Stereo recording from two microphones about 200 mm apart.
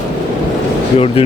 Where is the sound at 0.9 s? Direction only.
30° left (ahead or behind).